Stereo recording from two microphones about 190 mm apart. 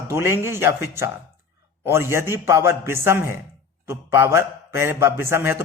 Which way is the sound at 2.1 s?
15° right (ahead or behind).